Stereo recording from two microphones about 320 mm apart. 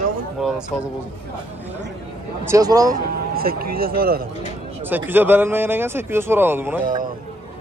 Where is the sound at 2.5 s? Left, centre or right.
Centre.